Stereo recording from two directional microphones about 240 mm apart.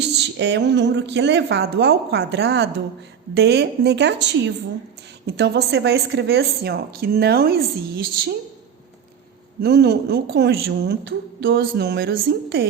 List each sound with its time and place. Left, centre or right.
0.0 s a woman's voice: right
9.6 s a woman's voice: right